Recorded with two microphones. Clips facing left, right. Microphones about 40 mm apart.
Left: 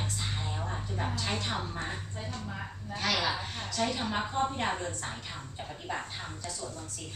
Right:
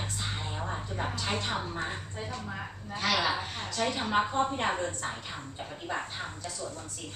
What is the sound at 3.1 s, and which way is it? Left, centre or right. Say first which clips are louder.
A woman's voice: right 3 dB; right.